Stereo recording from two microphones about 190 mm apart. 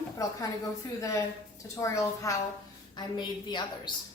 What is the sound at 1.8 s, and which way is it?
A woman's voice, 15° left (ahead or behind).